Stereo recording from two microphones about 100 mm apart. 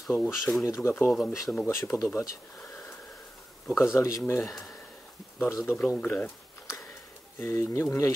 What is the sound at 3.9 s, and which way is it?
Speech, 30° left (ahead or behind).